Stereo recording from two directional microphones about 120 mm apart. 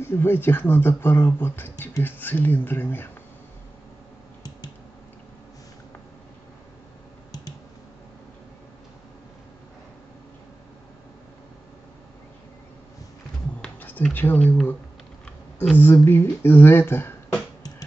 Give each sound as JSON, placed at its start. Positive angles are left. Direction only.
{"t": 0.0, "sound": "speech", "side_deg": 20}
{"t": 13.6, "sound": "a sound", "side_deg": 15}
{"t": 14.1, "sound": "speech", "side_deg": 15}
{"t": 15.2, "sound": "typing", "side_deg": 10}
{"t": 16.1, "sound": "speech", "side_deg": 20}